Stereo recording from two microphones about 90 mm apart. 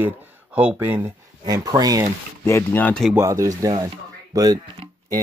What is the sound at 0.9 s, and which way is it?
Speech, 45° right (ahead or behind).